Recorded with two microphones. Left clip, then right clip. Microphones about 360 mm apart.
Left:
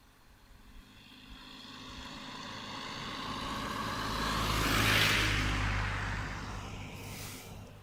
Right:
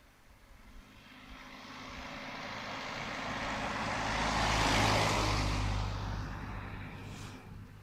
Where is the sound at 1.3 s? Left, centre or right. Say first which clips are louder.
Right 1 dB; right; by 5.8 s centre.